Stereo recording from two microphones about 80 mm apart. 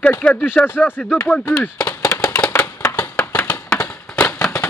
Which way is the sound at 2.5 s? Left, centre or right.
Left.